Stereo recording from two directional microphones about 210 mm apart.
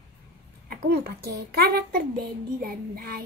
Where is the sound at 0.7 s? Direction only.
50° right (ahead or behind).